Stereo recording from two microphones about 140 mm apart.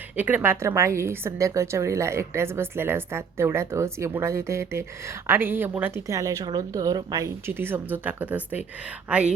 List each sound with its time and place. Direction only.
0.2 s a woman's voice: 10° right (ahead or behind)